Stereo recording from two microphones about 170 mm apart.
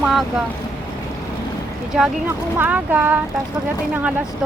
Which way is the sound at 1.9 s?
5° right (ahead or behind).